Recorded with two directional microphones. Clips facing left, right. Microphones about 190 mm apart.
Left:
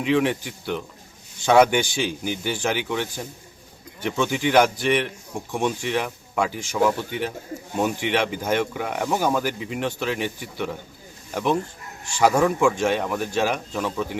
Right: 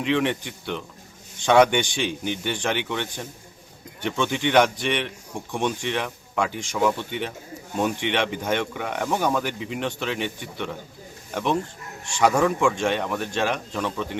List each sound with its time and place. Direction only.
0.0 s speech: 5° left (ahead or behind)